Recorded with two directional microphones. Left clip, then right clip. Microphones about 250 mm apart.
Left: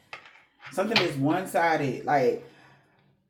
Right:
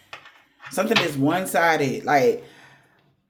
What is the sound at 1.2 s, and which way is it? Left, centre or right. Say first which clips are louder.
Speech: right 5 dB; right.